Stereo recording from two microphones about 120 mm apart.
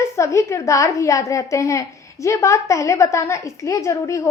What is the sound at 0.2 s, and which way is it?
A woman's voice, 25° left (ahead or behind).